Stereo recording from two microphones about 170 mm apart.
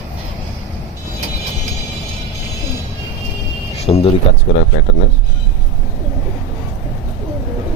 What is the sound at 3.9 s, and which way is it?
Speech, 30° left (ahead or behind).